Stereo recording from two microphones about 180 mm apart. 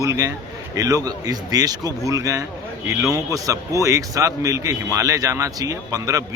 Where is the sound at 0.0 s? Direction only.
15° right (ahead or behind).